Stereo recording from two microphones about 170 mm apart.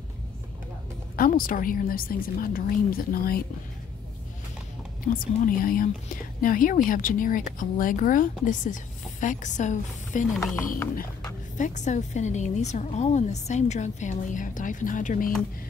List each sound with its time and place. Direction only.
1.1 s a woman's voice: 55° left (ahead or behind)
5.0 s a woman's voice: 55° left (ahead or behind)
11.5 s speech: 45° left (ahead or behind)